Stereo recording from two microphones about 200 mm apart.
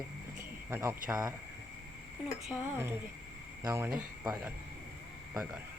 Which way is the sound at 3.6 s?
15° right (ahead or behind).